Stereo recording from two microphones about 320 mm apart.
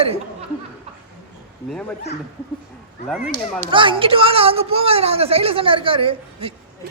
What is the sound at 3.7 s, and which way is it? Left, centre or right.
Speech, centre.